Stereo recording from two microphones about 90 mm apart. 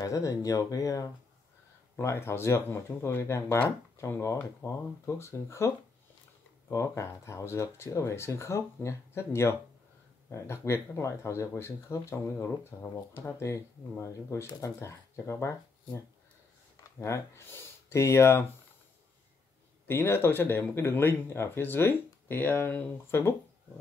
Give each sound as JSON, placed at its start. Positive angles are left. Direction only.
{"t": 0.0, "sound": "speech", "side_deg": 40}
{"t": 2.0, "sound": "speech", "side_deg": 30}
{"t": 6.7, "sound": "speech", "side_deg": 35}
{"t": 17.0, "sound": "speech", "side_deg": 30}
{"t": 19.9, "sound": "speech", "side_deg": 25}